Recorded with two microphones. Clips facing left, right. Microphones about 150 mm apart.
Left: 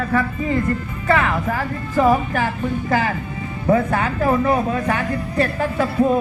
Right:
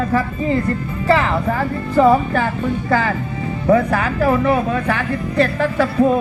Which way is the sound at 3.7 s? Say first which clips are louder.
Right 2 dB; 25° left (ahead or behind).